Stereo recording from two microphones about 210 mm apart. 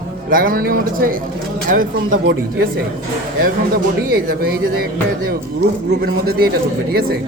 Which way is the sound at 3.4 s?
45° right (ahead or behind).